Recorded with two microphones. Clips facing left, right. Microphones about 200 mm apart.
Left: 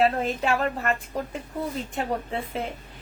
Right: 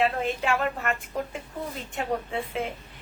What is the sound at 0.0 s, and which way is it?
Speech, 40° left (ahead or behind).